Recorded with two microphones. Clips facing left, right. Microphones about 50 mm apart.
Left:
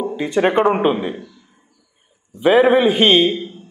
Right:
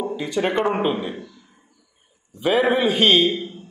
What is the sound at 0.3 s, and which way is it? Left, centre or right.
Speech, left.